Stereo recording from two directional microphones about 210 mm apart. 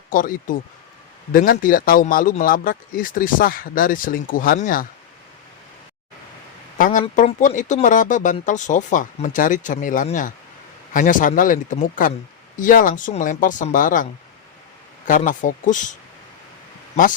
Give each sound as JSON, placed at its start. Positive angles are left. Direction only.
{"t": 0.1, "sound": "a man's voice", "side_deg": 40}
{"t": 6.7, "sound": "a sound", "side_deg": 40}
{"t": 7.2, "sound": "a man's voice", "side_deg": 35}